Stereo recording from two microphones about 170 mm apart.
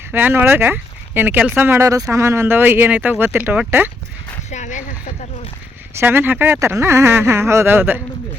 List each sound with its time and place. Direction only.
0.1 s speech: 10° right (ahead or behind)
4.5 s a sound: 45° left (ahead or behind)
6.0 s speech: 15° right (ahead or behind)